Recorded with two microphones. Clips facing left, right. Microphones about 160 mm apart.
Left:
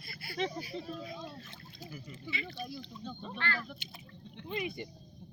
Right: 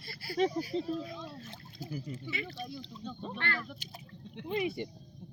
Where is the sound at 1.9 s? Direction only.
40° right (ahead or behind).